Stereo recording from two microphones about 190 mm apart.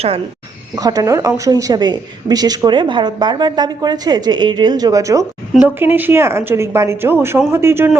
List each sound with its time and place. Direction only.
0.8 s a woman's voice: 20° right (ahead or behind)